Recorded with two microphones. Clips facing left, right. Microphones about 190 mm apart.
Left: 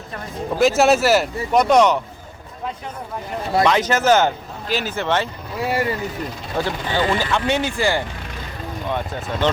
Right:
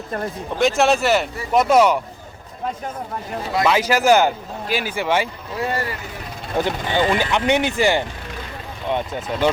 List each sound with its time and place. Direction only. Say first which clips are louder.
0.6 s speech: left 2 dB; centre (ahead or behind)
3.7 s speech: right 2 dB; 10° right (ahead or behind)
5.5 s speech: left 1 dB; 5° left (ahead or behind)
6.6 s speech: right 2 dB; 20° right (ahead or behind)